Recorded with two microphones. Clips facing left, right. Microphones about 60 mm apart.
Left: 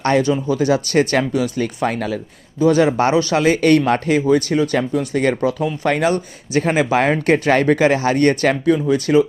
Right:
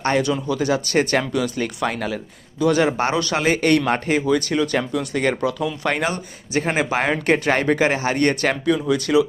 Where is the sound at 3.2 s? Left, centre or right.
Right.